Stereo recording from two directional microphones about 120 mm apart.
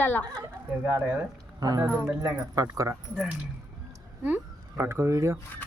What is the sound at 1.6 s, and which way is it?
Speech, 30° right (ahead or behind).